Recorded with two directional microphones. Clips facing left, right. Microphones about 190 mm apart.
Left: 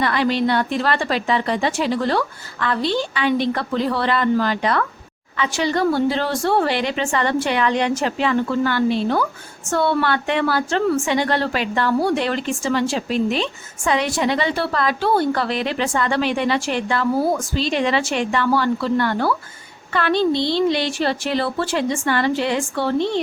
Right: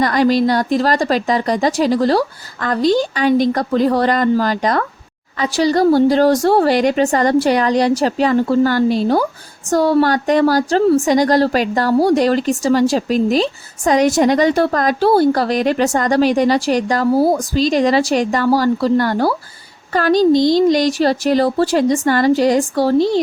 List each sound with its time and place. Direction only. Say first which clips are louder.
0.0 s a woman's voice: right 5 dB; 40° right (ahead or behind)